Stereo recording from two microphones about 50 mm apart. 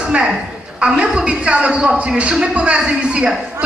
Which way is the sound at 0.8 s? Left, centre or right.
Centre.